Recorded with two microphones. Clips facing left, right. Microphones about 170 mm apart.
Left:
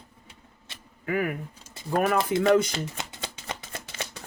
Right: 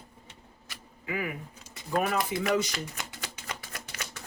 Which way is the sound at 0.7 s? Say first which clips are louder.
Even; 25° left (ahead or behind).